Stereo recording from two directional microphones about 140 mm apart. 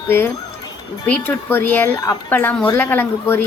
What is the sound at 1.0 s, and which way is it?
A woman's voice, 15° left (ahead or behind).